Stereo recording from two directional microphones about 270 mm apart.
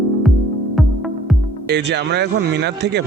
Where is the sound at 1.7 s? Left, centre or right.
Right.